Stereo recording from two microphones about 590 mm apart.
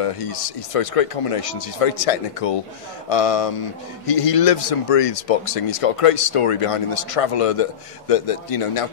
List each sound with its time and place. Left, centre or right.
0.0 s speech: left